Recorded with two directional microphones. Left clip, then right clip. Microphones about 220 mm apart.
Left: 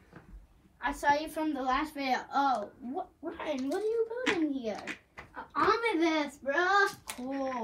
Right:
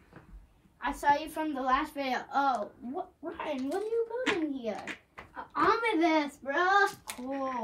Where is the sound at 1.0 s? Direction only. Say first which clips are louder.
Right 1 dB; 15° right (ahead or behind).